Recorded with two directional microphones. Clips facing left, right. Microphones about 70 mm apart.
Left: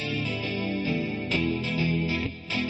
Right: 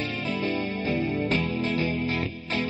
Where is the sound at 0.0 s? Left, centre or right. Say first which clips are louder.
Right 2 dB; right.